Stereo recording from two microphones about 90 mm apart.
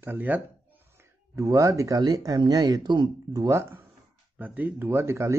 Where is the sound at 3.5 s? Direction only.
30° right (ahead or behind).